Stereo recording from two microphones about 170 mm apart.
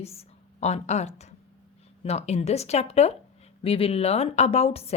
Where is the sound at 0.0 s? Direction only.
35° left (ahead or behind).